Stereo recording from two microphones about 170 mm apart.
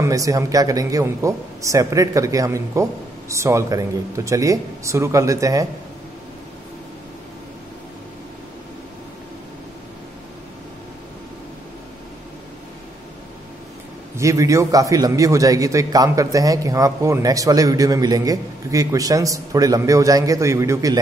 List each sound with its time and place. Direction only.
0.0 s a man's voice: 20° right (ahead or behind)
14.1 s a man's voice: 20° right (ahead or behind)